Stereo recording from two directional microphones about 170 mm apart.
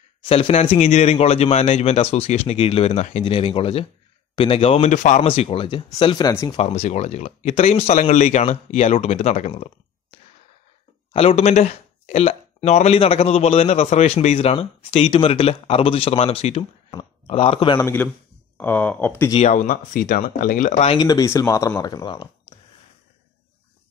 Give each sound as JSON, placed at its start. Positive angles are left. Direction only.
{"t": 0.2, "sound": "speech", "side_deg": 35}
{"t": 6.5, "sound": "speech", "side_deg": 40}
{"t": 11.1, "sound": "speech", "side_deg": 35}
{"t": 17.8, "sound": "speech", "side_deg": 10}
{"t": 19.4, "sound": "speech", "side_deg": 50}
{"t": 20.9, "sound": "speech", "side_deg": 25}